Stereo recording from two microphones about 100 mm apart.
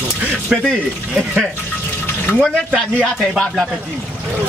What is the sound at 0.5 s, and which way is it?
Speech, 10° right (ahead or behind).